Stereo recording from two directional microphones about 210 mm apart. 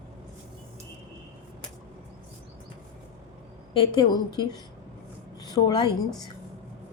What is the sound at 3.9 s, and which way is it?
A woman's voice, 20° left (ahead or behind).